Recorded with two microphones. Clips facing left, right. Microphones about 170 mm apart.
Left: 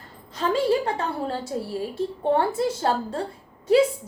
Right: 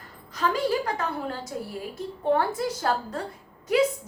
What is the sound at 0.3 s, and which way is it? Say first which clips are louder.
A woman's voice: left 3 dB; 25° left (ahead or behind).